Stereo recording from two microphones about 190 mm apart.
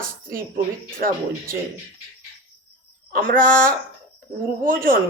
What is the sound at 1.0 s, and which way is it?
Speech, 50° right (ahead or behind).